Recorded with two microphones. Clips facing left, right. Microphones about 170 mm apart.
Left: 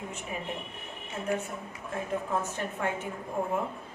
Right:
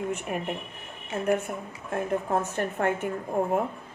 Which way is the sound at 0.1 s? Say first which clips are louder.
Right 7 dB; 60° right (ahead or behind).